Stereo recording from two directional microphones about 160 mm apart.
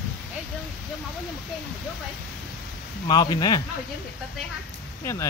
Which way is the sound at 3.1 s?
25° left (ahead or behind).